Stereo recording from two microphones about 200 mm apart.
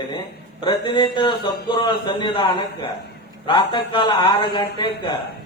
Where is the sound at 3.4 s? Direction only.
25° left (ahead or behind).